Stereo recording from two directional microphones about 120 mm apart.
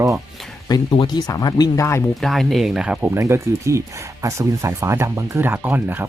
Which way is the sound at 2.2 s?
Centre (ahead or behind).